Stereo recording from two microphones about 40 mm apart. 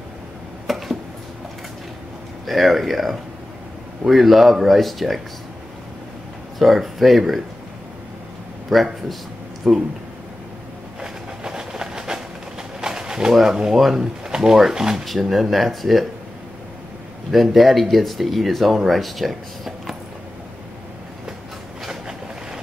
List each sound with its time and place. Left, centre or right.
0.7 s a sound: centre
2.4 s speech: centre
6.6 s speech: centre
8.6 s speech: centre
11.0 s train: centre
12.8 s pigeon: centre
13.3 s speech: centre
14.2 s speech: centre
15.0 s speech: centre
17.3 s speech: centre
21.8 s vehicle: centre